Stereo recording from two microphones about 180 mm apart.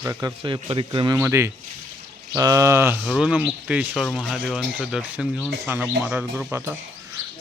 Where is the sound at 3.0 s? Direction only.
Centre (ahead or behind).